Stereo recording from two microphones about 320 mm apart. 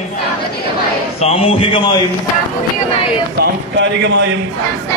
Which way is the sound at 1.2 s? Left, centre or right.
Centre.